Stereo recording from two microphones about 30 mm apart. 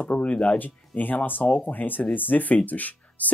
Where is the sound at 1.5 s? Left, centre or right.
Left.